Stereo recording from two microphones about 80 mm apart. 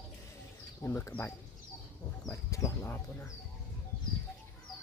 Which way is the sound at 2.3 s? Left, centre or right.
Left.